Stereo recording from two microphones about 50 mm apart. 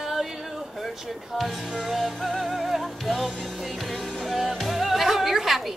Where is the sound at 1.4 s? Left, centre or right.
Centre.